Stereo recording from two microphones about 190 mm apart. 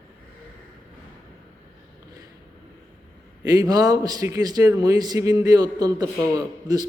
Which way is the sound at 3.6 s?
20° right (ahead or behind).